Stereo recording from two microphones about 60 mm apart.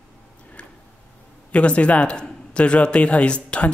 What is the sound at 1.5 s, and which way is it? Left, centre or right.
Speech, left.